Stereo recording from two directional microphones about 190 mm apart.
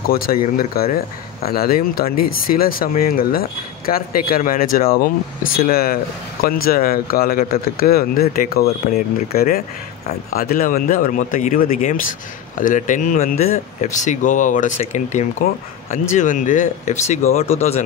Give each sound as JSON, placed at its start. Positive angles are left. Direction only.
{"t": 0.1, "sound": "speech", "side_deg": 50}
{"t": 17.6, "sound": "speech", "side_deg": 35}